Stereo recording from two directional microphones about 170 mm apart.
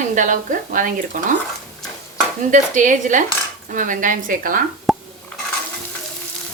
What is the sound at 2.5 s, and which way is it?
Speech, 50° right (ahead or behind).